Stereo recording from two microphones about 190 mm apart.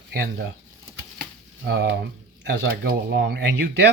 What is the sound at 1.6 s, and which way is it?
Speech, 65° right (ahead or behind).